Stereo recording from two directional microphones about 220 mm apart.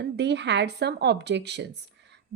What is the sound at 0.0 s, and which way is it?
Speech, 50° right (ahead or behind).